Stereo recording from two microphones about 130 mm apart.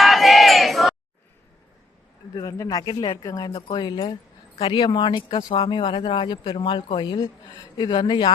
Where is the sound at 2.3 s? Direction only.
30° left (ahead or behind).